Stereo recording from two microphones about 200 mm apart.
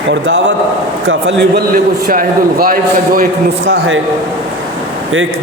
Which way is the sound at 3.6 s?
60° right (ahead or behind).